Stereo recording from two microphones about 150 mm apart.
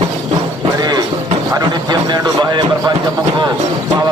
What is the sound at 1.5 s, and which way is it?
Speech, 30° right (ahead or behind).